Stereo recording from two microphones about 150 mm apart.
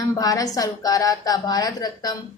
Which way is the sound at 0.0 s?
25° left (ahead or behind).